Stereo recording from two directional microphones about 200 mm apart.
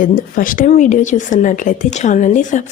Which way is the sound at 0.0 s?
45° left (ahead or behind).